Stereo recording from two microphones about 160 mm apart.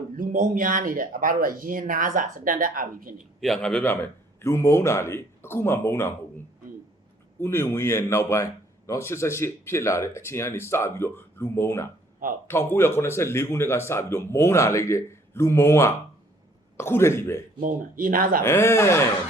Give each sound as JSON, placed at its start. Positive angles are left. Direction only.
{"t": 0.2, "sound": "speech", "side_deg": -55}
{"t": 3.4, "sound": "a man's voice", "side_deg": 5}
{"t": 4.4, "sound": "speech", "side_deg": 15}
{"t": 7.3, "sound": "speech", "side_deg": 15}
{"t": 17.6, "sound": "speech", "side_deg": -55}
{"t": 18.4, "sound": "speech", "side_deg": 15}